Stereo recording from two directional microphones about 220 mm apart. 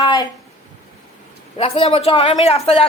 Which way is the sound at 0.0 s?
20° left (ahead or behind).